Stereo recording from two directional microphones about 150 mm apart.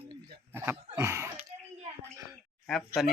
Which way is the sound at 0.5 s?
15° right (ahead or behind).